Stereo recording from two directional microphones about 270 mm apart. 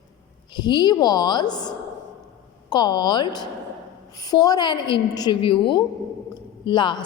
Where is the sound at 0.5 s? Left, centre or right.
Centre.